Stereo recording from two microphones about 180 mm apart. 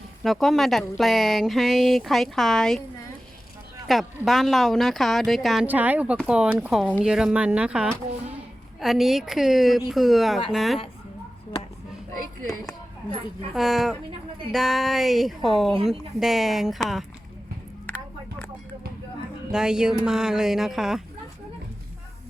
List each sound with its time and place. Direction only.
0.2 s speech: centre (ahead or behind)
3.8 s speech: centre (ahead or behind)
12.5 s a sound: 20° left (ahead or behind)
13.5 s speech: centre (ahead or behind)
17.8 s a sound: 10° left (ahead or behind)
19.5 s speech: 5° right (ahead or behind)